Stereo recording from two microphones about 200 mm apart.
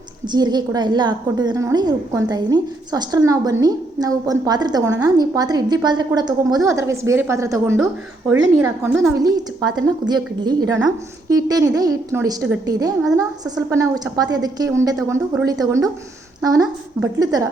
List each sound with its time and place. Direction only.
0.3 s a woman's voice: 20° right (ahead or behind)